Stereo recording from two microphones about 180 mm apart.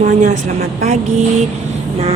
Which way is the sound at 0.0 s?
45° right (ahead or behind).